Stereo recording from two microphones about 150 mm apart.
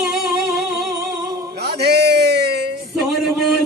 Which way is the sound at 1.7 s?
90° right.